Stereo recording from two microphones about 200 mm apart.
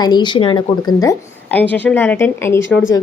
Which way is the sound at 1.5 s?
10° left (ahead or behind).